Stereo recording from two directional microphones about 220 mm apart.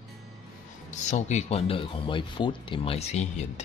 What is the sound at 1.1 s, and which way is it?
Speech, 30° left (ahead or behind).